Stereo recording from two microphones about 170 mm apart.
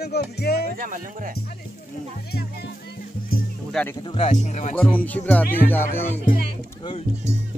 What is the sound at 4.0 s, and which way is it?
Speech, 25° left (ahead or behind).